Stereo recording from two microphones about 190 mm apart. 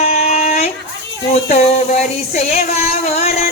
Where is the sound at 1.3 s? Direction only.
35° left (ahead or behind).